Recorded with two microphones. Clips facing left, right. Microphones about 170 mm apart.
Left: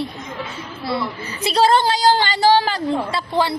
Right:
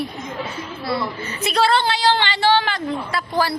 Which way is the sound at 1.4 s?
35° left (ahead or behind).